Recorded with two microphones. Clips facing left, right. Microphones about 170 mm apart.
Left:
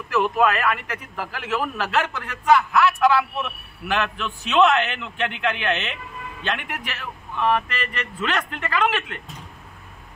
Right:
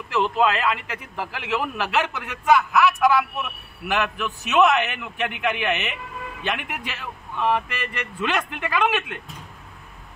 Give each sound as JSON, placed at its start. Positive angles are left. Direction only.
{"t": 0.1, "sound": "a man's voice", "side_deg": -20}